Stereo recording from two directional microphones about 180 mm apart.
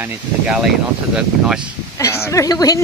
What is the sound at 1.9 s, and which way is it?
Speech, 15° left (ahead or behind).